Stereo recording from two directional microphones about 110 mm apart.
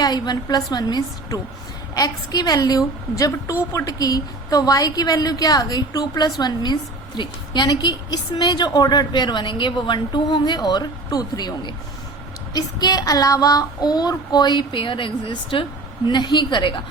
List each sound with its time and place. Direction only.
0.0 s a woman's voice: 40° left (ahead or behind)